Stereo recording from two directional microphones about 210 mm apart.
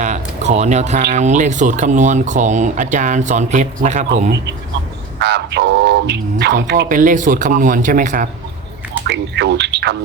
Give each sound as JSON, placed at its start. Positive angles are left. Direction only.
{"t": 0.0, "sound": "speech", "side_deg": -35}
{"t": 5.2, "sound": "speech", "side_deg": -55}
{"t": 6.8, "sound": "speech", "side_deg": -40}
{"t": 9.0, "sound": "speech", "side_deg": -50}